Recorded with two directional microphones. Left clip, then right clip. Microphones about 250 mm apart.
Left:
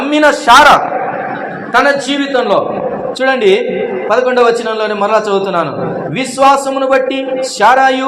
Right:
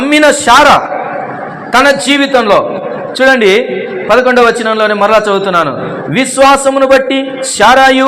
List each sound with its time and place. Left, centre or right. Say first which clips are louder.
0.0 s a man's voice: right 3 dB; right